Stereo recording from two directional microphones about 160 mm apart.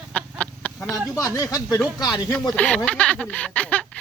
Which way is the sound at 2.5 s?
5° left (ahead or behind).